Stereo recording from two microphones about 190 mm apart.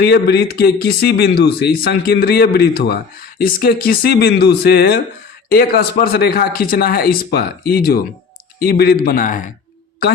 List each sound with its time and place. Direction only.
0.0 s speech: 60° left (ahead or behind); by 9.5 s 45° left (ahead or behind)